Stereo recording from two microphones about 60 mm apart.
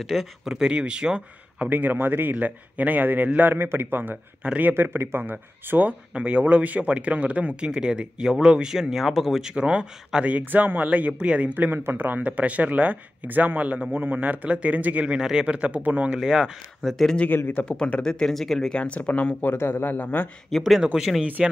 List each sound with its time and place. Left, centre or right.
0.0 s speech: centre
0.5 s speech: centre; by 4.2 s right
4.4 s speech: right; by 9.6 s centre
9.6 s speech: centre
11.5 s speech: right
12.2 s speech: right
16.2 s speech: centre
17.6 s speech: centre
18.2 s speech: centre
18.8 s speech: left
20.4 s speech: centre
20.8 s speech: centre